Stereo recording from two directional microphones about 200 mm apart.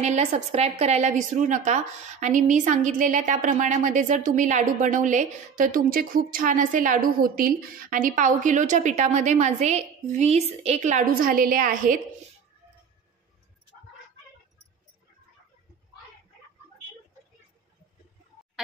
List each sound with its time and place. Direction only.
0.0 s a woman's voice: 35° right (ahead or behind)